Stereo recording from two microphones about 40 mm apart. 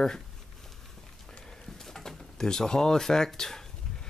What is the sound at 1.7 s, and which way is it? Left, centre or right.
Speech, centre.